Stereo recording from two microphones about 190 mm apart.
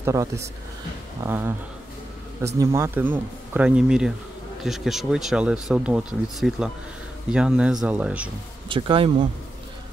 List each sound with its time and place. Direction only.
0.0 s speech: 15° right (ahead or behind)
8.6 s speech: 25° right (ahead or behind)